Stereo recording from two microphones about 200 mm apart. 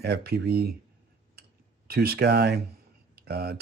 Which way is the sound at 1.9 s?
50° right (ahead or behind).